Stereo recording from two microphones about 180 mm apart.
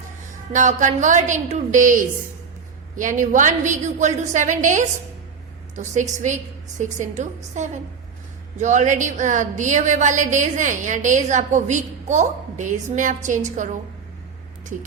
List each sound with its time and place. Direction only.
0.5 s a woman's voice: 45° right (ahead or behind)